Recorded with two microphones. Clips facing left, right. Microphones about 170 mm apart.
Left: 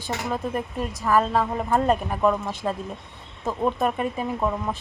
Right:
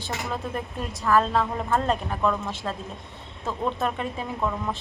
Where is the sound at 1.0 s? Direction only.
10° left (ahead or behind).